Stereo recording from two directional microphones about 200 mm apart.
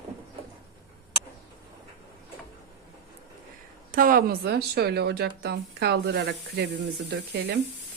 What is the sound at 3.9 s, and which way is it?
Speech, 45° right (ahead or behind).